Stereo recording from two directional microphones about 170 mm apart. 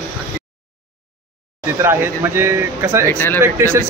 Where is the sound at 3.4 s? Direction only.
15° right (ahead or behind).